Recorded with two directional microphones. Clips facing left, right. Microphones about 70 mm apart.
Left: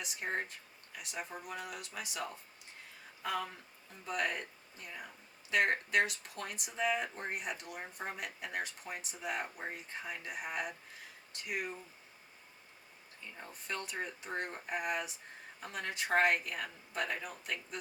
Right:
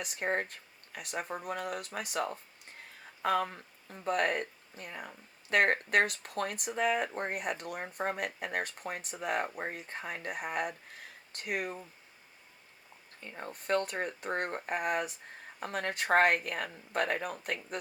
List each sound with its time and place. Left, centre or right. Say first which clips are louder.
0.0 s speech: right 5 dB; right
13.2 s speech: right 8 dB; right